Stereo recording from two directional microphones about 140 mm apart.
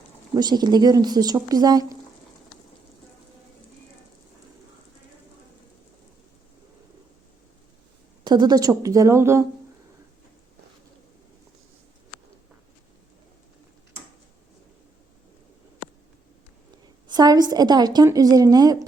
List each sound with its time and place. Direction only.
0.3 s a woman's voice: 30° right (ahead or behind)
8.2 s a woman's voice: 30° right (ahead or behind)
17.1 s a woman's voice: 30° right (ahead or behind)